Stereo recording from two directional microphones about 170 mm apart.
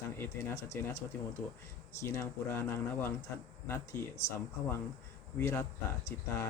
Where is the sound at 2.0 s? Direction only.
15° left (ahead or behind).